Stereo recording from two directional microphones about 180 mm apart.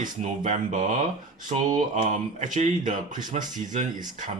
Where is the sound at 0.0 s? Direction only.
45° right (ahead or behind).